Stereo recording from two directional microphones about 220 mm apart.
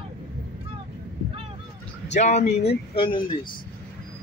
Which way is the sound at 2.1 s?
30° left (ahead or behind).